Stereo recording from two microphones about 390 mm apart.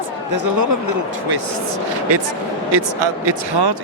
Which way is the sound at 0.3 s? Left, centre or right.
Right.